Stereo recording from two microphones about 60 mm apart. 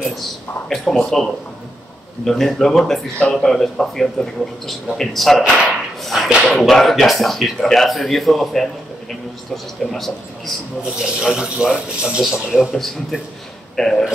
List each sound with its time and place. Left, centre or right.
0.7 s speech: centre
2.2 s speech: centre
5.4 s speech: centre
9.8 s speech: centre
11.0 s speech: centre
12.2 s speech: centre
12.7 s speech: centre